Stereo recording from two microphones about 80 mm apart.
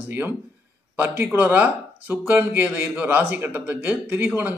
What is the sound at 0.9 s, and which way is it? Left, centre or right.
Speech, right.